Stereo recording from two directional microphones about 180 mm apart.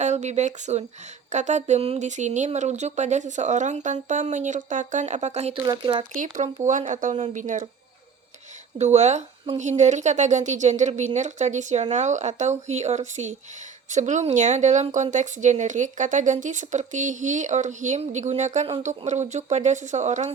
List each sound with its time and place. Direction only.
0.0 s speech: 40° right (ahead or behind)
5.6 s speech: 25° right (ahead or behind)
6.7 s speech: 45° right (ahead or behind)
8.8 s speech: 40° right (ahead or behind)